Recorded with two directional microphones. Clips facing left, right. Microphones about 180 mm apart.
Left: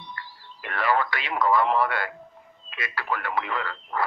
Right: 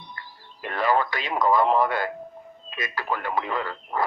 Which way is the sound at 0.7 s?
20° right (ahead or behind).